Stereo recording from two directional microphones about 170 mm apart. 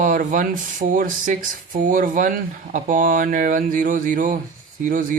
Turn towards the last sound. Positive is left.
turn(degrees=-50)  # may be behind; listen again after turning